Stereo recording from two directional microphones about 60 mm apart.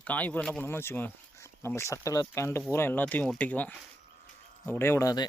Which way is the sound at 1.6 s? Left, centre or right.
Left.